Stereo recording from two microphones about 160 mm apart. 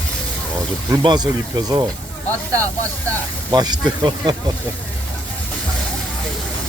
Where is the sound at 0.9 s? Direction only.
25° right (ahead or behind).